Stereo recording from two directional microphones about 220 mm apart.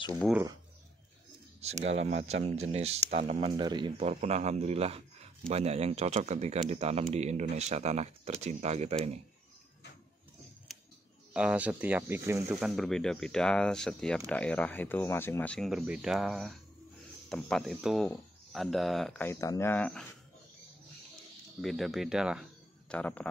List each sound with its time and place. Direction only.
2.0 s speech: 30° right (ahead or behind)
10.7 s a sound: centre (ahead or behind)
11.3 s speech: 5° right (ahead or behind)
21.5 s speech: centre (ahead or behind)